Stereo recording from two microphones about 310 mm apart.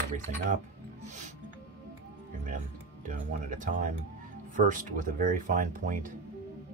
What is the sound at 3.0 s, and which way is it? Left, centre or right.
Speech, right.